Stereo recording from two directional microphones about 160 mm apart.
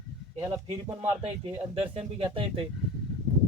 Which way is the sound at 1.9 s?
35° right (ahead or behind).